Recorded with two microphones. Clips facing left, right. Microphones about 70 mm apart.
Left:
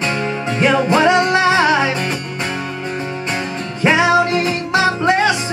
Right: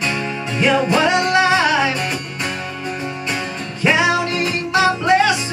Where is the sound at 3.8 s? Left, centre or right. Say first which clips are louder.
Left 3 dB; left.